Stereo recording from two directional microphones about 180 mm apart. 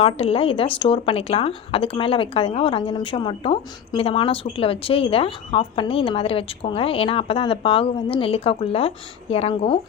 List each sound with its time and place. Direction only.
0.0 s speech: 35° left (ahead or behind)